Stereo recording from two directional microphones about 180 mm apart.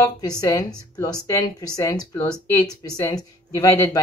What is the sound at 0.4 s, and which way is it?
Speech, 20° left (ahead or behind).